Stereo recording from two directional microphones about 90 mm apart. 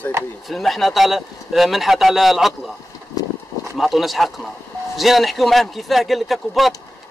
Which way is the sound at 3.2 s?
45° left (ahead or behind).